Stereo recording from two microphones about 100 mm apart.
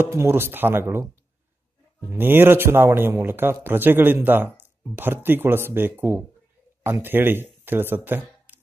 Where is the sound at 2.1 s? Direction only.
20° right (ahead or behind).